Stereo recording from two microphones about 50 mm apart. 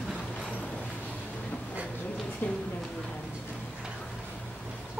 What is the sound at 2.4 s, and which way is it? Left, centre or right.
Speech, left.